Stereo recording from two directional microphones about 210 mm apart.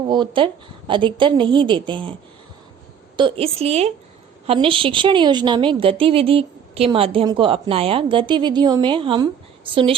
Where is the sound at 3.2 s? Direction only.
25° right (ahead or behind).